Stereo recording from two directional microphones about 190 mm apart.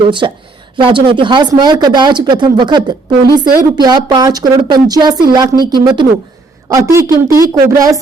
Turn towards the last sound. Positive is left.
turn(degrees=-15)  # may be behind; listen again after turning